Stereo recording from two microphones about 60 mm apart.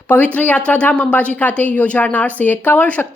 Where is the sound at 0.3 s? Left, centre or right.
Left.